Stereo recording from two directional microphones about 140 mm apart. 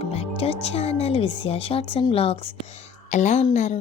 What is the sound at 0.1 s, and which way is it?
Music, 45° left (ahead or behind).